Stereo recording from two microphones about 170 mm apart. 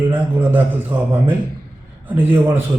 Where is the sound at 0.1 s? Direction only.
10° right (ahead or behind).